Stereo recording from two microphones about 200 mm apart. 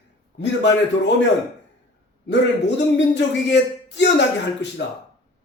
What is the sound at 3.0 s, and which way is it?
A man's voice, 60° left (ahead or behind).